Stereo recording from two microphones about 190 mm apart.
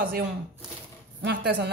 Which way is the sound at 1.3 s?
60° right (ahead or behind).